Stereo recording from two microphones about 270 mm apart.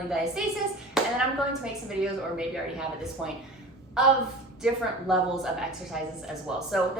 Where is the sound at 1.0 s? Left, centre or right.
Centre.